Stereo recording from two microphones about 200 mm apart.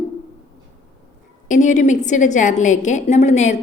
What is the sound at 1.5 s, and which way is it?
A woman's voice, 40° left (ahead or behind).